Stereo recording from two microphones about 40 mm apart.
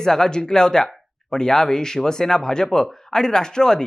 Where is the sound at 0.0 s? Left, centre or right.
Centre.